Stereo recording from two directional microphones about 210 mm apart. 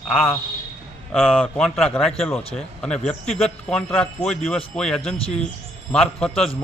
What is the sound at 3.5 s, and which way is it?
Speech, 5° left (ahead or behind).